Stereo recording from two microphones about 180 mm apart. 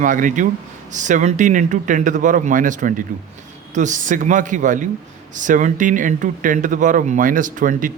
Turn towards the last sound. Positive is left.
turn(degrees=-45)  # may be behind; listen again after turning